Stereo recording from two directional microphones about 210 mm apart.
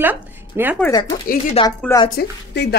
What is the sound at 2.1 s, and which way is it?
Speech, 55° left (ahead or behind).